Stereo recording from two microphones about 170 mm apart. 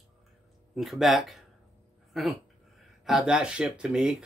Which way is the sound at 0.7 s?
Centre (ahead or behind).